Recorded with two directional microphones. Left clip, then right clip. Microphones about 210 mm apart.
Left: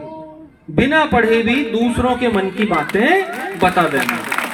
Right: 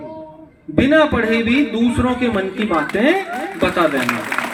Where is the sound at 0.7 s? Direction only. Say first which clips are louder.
Even; 25° left (ahead or behind).